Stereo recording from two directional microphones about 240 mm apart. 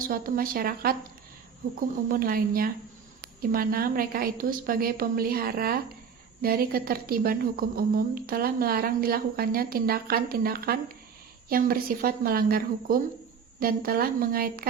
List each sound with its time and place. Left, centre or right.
0.1 s a woman's voice: right
2.0 s a woman's voice: right